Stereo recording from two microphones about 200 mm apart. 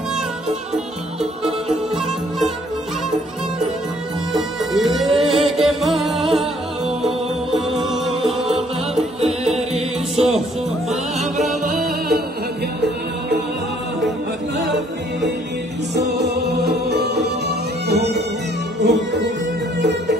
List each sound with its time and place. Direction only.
4.3 s music: centre (ahead or behind)
9.2 s music: 30° right (ahead or behind)
10.9 s music: centre (ahead or behind)
11.6 s music: 45° right (ahead or behind)
15.9 s music: 55° right (ahead or behind)